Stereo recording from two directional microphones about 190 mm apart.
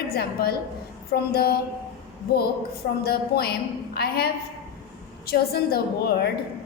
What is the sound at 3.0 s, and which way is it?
A woman's voice, 55° left (ahead or behind).